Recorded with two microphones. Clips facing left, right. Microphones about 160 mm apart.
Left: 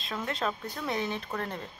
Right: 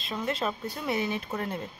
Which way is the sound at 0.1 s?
5° right (ahead or behind).